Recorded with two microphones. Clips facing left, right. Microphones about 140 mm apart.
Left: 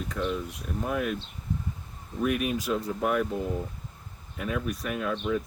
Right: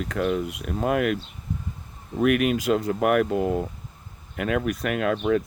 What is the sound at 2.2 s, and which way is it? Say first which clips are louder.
Speech: right 7 dB; 85° right.